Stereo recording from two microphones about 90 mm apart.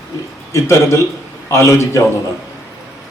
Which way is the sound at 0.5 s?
30° left (ahead or behind).